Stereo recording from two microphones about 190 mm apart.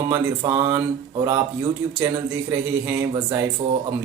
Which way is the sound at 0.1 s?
15° right (ahead or behind).